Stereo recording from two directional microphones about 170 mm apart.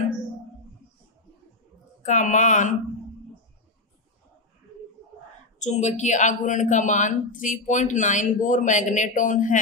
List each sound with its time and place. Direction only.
2.0 s a man's voice: 45° left (ahead or behind)
5.6 s a man's voice: 40° left (ahead or behind)